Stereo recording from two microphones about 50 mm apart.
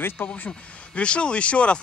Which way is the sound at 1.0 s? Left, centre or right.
Left.